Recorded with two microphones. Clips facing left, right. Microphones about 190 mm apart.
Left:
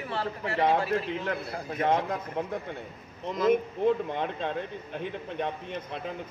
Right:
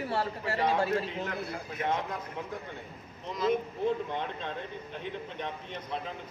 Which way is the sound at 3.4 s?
50° left (ahead or behind).